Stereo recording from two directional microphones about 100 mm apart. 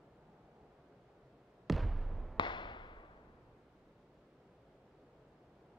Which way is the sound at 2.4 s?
50° left (ahead or behind).